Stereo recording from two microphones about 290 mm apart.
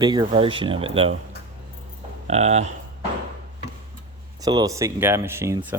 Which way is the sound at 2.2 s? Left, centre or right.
Right.